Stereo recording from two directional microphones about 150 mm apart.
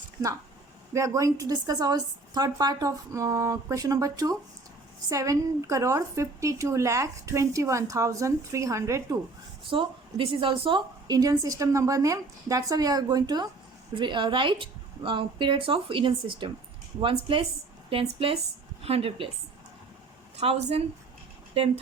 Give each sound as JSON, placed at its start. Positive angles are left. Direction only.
{"t": 0.9, "sound": "a woman's voice", "side_deg": -20}
{"t": 9.6, "sound": "a woman's voice", "side_deg": -35}
{"t": 20.3, "sound": "a woman's voice", "side_deg": -45}